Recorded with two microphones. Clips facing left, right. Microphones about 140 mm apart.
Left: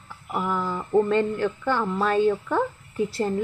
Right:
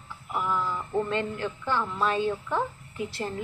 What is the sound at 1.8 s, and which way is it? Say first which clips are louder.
Speech: left 5 dB; 45° left (ahead or behind).